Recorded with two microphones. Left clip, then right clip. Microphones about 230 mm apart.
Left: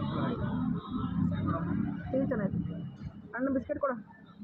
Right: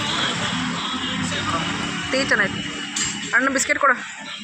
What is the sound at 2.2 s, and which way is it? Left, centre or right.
Speech, right.